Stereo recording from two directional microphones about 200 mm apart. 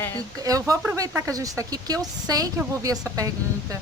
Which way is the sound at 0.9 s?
15° right (ahead or behind).